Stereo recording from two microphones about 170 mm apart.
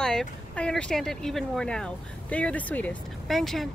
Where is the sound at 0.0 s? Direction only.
5° left (ahead or behind).